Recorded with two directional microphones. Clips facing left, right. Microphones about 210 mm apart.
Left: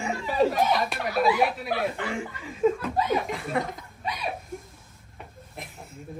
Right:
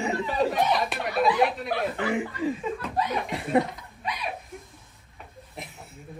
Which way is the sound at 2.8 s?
Centre (ahead or behind).